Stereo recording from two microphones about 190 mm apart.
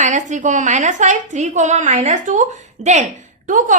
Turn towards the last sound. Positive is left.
turn(degrees=-45)  # may be behind; listen again after turning